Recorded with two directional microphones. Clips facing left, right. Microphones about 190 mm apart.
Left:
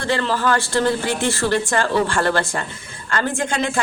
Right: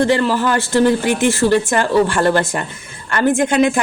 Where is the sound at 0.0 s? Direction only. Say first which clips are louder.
Right 6 dB; 15° right (ahead or behind).